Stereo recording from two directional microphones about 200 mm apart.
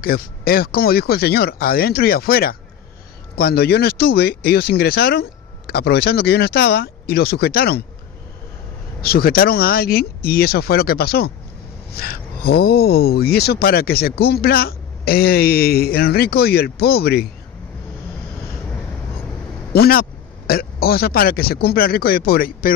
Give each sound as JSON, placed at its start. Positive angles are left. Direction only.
{"t": 0.0, "sound": "speech", "side_deg": 50}
{"t": 9.0, "sound": "speech", "side_deg": 50}
{"t": 19.7, "sound": "speech", "side_deg": 50}